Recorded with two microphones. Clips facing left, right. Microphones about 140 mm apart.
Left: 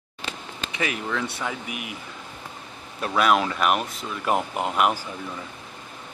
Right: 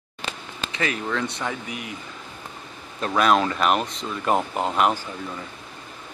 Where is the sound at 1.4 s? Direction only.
10° left (ahead or behind).